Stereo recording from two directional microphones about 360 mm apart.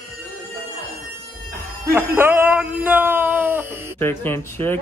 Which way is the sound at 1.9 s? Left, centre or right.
Centre.